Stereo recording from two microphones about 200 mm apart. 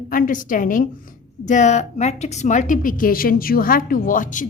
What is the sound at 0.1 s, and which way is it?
A woman's voice, 45° left (ahead or behind).